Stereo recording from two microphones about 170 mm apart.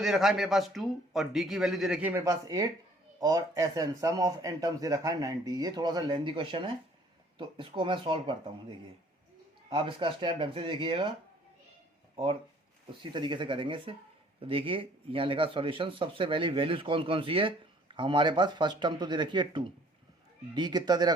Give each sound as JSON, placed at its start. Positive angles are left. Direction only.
{"t": 0.0, "sound": "a man's voice", "side_deg": 0}
{"t": 9.6, "sound": "speech", "side_deg": -25}
{"t": 12.1, "sound": "speech", "side_deg": -30}